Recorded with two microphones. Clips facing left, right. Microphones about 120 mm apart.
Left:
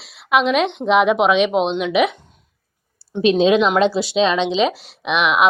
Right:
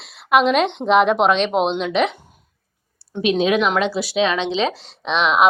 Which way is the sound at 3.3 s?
25° left (ahead or behind).